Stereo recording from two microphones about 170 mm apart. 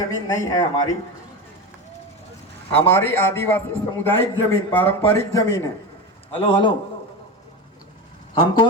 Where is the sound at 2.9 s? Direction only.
15° left (ahead or behind).